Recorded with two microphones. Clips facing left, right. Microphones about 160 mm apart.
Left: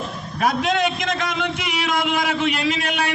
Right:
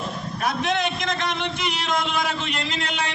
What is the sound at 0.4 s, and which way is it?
A man's voice, 75° left (ahead or behind).